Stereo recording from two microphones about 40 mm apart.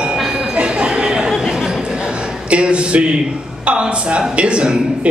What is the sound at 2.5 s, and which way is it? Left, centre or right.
Speech, right.